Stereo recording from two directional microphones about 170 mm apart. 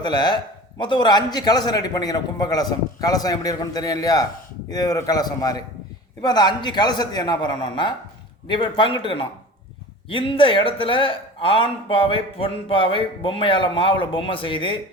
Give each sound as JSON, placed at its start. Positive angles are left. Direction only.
{"t": 0.0, "sound": "a man's voice", "side_deg": 25}